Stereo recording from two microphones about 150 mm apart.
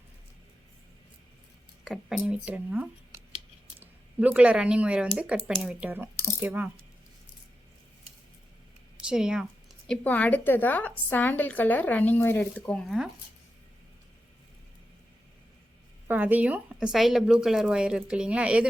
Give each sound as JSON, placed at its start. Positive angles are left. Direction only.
{"t": 1.8, "sound": "speech", "side_deg": 0}
{"t": 9.0, "sound": "speech", "side_deg": -5}
{"t": 16.0, "sound": "speech", "side_deg": -10}